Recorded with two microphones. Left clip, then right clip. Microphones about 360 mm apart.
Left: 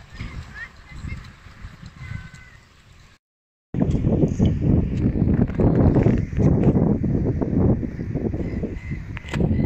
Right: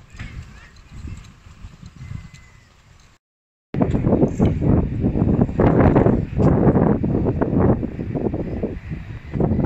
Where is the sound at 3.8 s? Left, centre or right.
Right.